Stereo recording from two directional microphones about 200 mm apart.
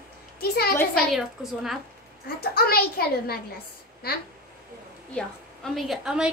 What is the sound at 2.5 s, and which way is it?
Speech, 50° left (ahead or behind).